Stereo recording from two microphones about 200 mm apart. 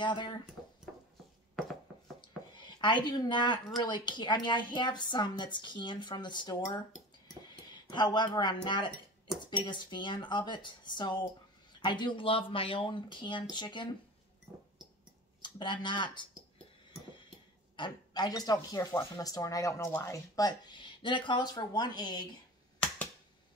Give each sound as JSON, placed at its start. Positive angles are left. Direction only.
{"t": 0.0, "sound": "speech", "side_deg": 25}
{"t": 2.2, "sound": "speech", "side_deg": 20}
{"t": 15.4, "sound": "speech", "side_deg": 25}
{"t": 17.7, "sound": "speech", "side_deg": 20}